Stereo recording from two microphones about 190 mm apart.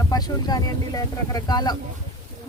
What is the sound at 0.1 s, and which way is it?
Speech, 20° left (ahead or behind).